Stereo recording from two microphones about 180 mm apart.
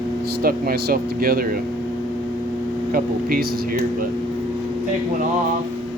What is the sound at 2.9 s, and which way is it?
Speech, 55° right (ahead or behind).